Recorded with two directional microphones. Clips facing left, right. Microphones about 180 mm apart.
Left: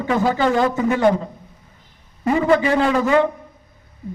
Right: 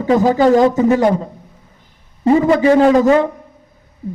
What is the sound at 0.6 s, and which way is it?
Speech, 20° right (ahead or behind).